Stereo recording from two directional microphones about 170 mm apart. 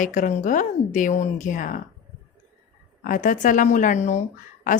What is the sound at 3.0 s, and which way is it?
Speech, 50° left (ahead or behind).